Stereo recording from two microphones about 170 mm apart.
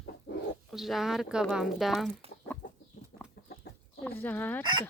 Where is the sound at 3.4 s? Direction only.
70° left (ahead or behind).